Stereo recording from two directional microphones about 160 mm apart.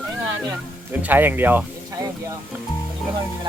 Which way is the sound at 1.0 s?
10° right (ahead or behind).